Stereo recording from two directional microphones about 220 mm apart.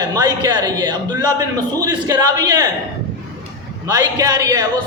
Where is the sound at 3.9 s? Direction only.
15° right (ahead or behind).